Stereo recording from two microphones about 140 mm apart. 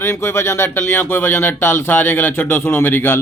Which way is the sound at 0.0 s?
20° left (ahead or behind).